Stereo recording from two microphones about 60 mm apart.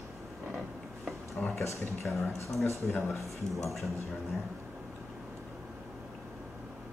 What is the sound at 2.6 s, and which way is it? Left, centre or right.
Speech, left.